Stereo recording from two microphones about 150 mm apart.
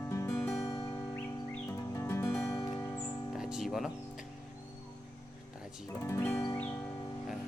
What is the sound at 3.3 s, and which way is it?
Music, 5° right (ahead or behind).